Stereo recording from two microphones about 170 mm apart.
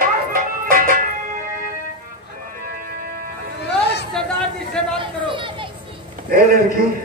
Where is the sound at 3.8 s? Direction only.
80° left.